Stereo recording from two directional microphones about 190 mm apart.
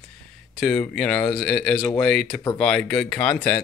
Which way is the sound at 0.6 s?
5° left (ahead or behind).